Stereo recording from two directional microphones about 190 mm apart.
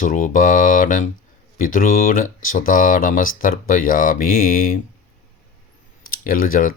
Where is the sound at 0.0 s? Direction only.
45° left (ahead or behind).